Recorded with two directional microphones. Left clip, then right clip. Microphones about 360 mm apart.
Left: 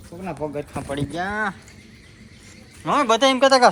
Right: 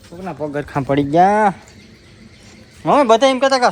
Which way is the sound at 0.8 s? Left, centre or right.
Right.